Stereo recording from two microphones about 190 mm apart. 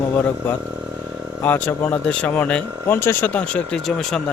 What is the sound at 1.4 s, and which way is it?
Speech, 10° left (ahead or behind).